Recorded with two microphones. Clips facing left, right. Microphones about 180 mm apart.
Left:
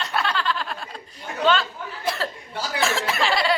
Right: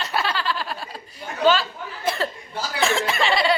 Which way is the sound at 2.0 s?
Centre (ahead or behind).